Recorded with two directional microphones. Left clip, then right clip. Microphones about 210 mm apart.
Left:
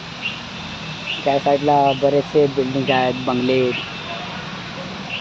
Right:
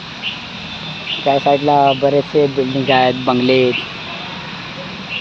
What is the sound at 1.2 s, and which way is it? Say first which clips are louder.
Speech: right 4 dB; 30° right (ahead or behind).